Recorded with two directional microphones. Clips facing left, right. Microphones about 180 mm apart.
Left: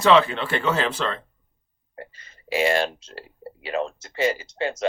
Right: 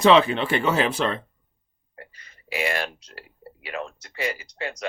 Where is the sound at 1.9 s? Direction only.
30° left (ahead or behind).